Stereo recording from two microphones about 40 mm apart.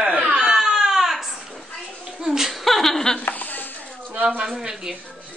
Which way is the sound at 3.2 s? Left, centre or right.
Left.